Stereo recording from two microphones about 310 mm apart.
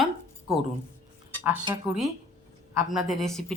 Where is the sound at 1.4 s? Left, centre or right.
Centre.